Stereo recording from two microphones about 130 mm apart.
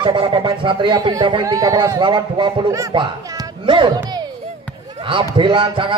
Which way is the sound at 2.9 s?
35° right (ahead or behind).